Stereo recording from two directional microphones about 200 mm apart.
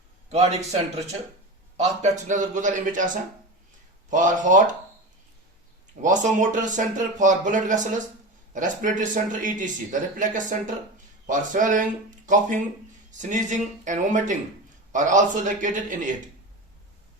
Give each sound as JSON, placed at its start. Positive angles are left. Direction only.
{"t": 0.3, "sound": "speech", "side_deg": -30}
{"t": 4.1, "sound": "speech", "side_deg": -40}
{"t": 6.0, "sound": "speech", "side_deg": -40}